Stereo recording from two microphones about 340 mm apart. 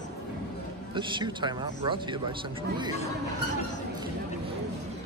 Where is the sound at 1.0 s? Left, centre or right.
Centre.